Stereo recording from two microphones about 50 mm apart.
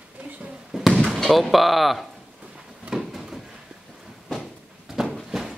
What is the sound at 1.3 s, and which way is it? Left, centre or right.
Speech, centre.